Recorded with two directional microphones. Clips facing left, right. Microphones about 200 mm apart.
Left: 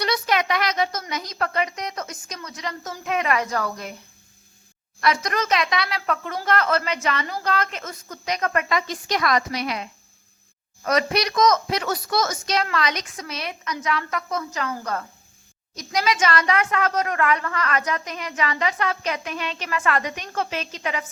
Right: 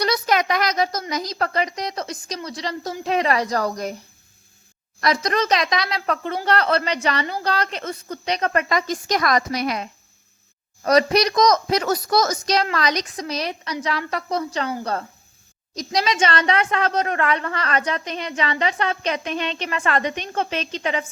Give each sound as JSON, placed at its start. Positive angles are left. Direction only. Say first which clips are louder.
{"t": 0.0, "sound": "a woman's voice", "louder": "right 2 dB", "side_deg": -40}
{"t": 4.9, "sound": "a woman's voice", "louder": "right 2 dB", "side_deg": -35}